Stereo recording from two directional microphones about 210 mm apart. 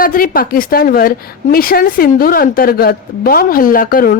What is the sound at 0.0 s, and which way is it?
Speech, 45° left (ahead or behind).